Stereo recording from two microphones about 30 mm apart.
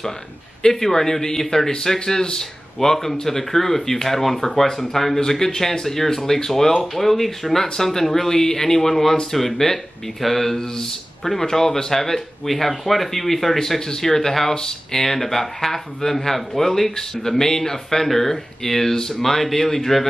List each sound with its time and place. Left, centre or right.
0.7 s speech: centre
13.6 s speech: centre